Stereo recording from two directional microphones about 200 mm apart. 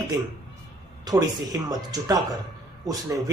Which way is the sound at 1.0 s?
20° right (ahead or behind).